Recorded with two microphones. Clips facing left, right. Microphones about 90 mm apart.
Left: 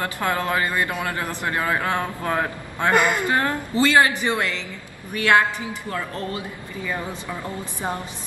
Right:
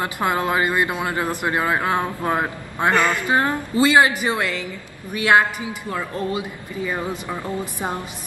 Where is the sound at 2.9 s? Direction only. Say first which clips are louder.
Left 1 dB; 20° left (ahead or behind).